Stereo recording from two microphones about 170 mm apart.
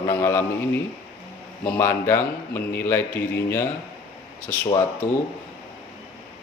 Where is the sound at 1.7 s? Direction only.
15° left (ahead or behind).